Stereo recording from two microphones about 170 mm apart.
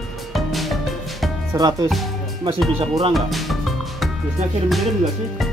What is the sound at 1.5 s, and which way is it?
Speech, 20° right (ahead or behind).